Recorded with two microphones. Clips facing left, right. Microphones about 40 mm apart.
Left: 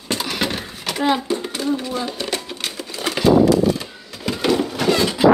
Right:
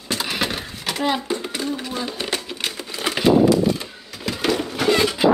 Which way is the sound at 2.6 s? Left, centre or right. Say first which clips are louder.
Even; centre.